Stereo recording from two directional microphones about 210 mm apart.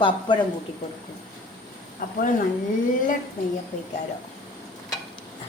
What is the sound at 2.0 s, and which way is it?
Speech, 40° left (ahead or behind).